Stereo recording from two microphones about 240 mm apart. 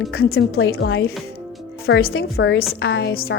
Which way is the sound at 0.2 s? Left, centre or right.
Left.